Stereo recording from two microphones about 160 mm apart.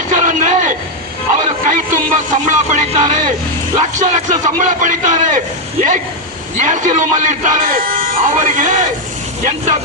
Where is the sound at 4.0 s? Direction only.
50° right (ahead or behind).